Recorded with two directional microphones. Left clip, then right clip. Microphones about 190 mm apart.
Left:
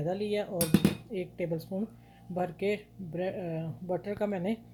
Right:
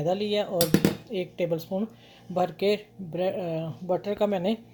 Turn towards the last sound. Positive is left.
turn(degrees=-10)  # may be behind; listen again after turning